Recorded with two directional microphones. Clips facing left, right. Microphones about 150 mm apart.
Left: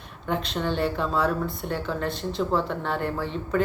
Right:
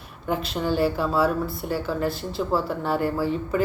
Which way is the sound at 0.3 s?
5° right (ahead or behind).